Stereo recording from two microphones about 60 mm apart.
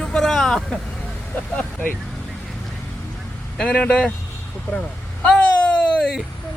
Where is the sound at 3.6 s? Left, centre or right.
Centre.